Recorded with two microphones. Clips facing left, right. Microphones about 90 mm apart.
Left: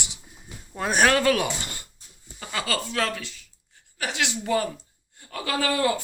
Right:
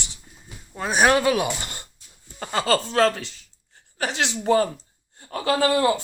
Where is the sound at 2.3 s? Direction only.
45° right (ahead or behind).